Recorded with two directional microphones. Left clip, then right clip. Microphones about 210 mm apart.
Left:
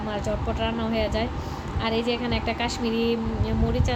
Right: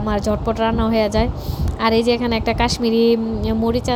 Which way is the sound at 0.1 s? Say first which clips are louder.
Right 9 dB; 40° right (ahead or behind).